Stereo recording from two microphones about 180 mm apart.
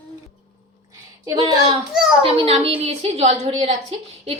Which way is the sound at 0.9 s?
20° right (ahead or behind).